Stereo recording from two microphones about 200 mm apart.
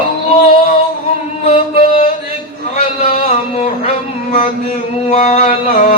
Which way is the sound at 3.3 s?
35° left (ahead or behind).